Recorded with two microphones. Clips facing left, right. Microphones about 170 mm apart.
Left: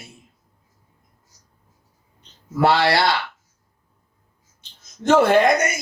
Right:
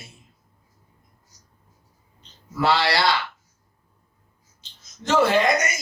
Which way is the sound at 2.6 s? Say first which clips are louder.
Left 4 dB; 55° left (ahead or behind).